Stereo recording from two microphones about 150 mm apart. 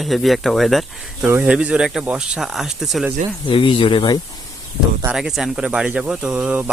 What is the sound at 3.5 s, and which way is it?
Speech, 35° left (ahead or behind).